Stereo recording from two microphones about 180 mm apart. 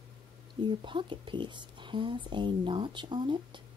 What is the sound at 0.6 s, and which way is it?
Speech, 25° right (ahead or behind).